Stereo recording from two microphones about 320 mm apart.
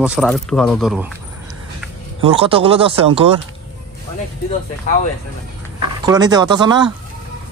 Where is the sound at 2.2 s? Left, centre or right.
Centre.